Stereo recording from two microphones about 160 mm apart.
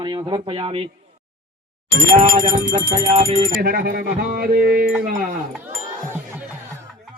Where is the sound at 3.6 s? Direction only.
75° right (ahead or behind).